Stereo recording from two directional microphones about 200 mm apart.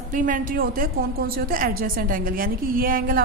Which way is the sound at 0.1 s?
40° right (ahead or behind).